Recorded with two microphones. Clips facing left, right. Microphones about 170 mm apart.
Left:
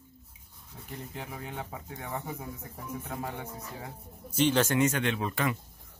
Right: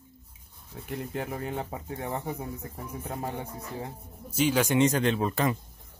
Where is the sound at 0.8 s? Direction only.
65° right (ahead or behind).